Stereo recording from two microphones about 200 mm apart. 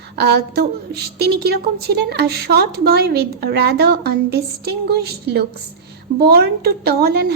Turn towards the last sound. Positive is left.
turn(degrees=-50)  # may be behind; listen again after turning